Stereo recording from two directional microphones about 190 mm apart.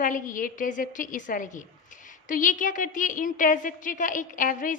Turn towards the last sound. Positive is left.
turn(degrees=45)  # may be behind; listen again after turning